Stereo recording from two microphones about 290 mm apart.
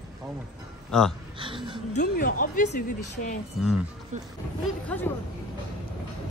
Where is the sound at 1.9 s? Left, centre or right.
Left.